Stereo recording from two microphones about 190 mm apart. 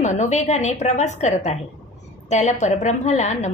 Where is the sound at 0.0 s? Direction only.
40° left (ahead or behind).